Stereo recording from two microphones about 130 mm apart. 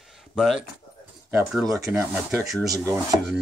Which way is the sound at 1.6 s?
25° right (ahead or behind).